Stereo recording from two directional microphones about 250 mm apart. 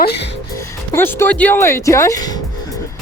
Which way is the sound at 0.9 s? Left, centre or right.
Centre.